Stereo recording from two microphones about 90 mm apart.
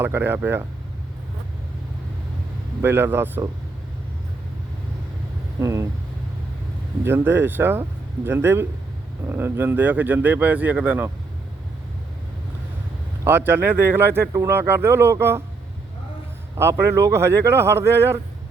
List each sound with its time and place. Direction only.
0.0 s speech: 25° right (ahead or behind)
2.8 s speech: 25° right (ahead or behind)
5.5 s speech: 35° right (ahead or behind)
7.0 s speech: 25° right (ahead or behind)
13.2 s speech: 25° right (ahead or behind)
16.6 s speech: 25° right (ahead or behind)